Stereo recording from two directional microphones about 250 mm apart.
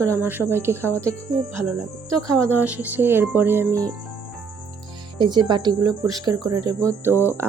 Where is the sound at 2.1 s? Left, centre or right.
Centre.